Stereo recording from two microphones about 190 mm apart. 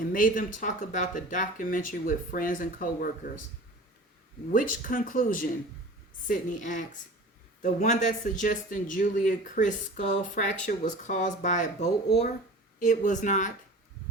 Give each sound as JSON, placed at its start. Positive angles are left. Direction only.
{"t": 0.1, "sound": "speech", "side_deg": 45}
{"t": 4.5, "sound": "speech", "side_deg": 45}